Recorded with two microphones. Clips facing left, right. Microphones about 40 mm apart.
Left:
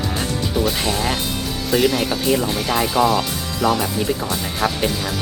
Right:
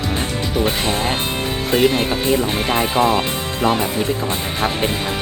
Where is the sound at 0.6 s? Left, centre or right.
Right.